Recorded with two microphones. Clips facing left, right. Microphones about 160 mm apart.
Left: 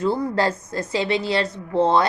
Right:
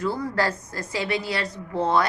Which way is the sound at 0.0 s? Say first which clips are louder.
Left 4 dB; 25° left (ahead or behind).